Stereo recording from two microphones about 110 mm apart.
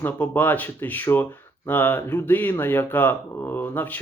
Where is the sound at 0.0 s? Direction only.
15° left (ahead or behind).